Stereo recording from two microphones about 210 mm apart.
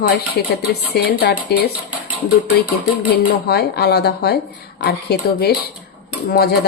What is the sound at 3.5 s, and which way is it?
Speech, 50° left (ahead or behind).